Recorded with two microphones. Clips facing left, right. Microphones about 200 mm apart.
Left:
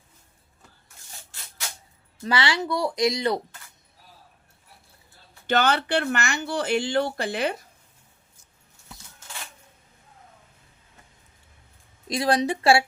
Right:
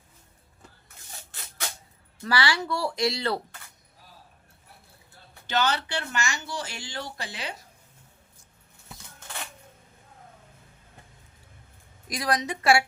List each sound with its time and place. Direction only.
2.2 s speech: 20° left (ahead or behind)
5.5 s speech: 55° left (ahead or behind)
12.0 s speech: 25° left (ahead or behind)